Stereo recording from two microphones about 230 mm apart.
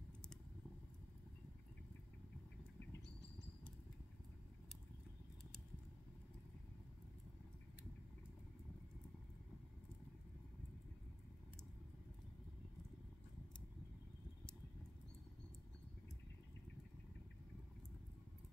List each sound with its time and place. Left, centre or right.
2.9 s bird: left